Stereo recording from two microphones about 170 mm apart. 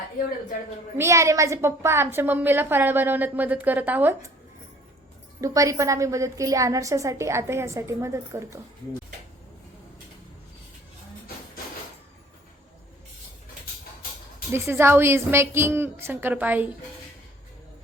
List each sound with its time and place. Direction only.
0.9 s a woman's voice: 15° right (ahead or behind)
5.4 s a woman's voice: 20° right (ahead or behind)
14.5 s a woman's voice: 15° right (ahead or behind)